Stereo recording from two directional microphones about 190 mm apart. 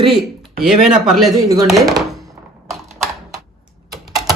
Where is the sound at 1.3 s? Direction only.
15° right (ahead or behind).